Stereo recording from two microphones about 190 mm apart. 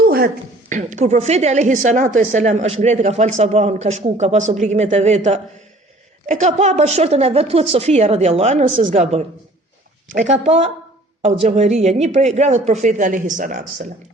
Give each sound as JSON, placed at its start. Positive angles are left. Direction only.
{"t": 0.7, "sound": "a woman's voice", "side_deg": -40}